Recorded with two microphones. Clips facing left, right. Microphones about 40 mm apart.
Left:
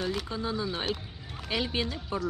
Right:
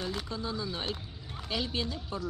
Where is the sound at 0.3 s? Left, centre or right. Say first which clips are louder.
Left 4 dB; left.